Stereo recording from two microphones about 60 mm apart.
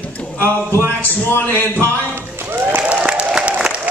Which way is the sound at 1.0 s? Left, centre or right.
Left.